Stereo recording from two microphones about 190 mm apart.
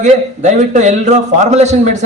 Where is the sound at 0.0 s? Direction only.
35° right (ahead or behind).